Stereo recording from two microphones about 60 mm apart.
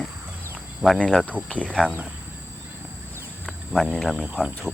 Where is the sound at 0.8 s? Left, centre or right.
Centre.